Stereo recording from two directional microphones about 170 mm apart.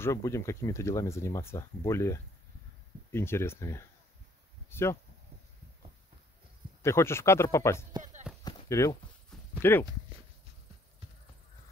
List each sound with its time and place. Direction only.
0.0 s speech: 15° left (ahead or behind)
6.8 s speech: 15° left (ahead or behind)
8.5 s a sound: 20° left (ahead or behind)
9.6 s speech: 15° left (ahead or behind)